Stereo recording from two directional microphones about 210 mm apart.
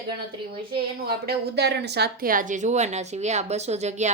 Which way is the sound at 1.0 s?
50° right (ahead or behind).